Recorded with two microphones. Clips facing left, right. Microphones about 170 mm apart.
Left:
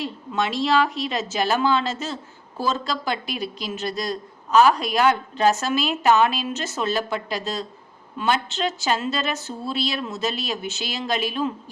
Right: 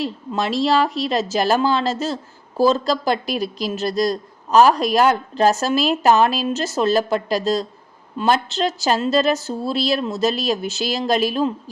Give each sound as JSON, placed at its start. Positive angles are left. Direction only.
{"t": 0.0, "sound": "speech", "side_deg": -35}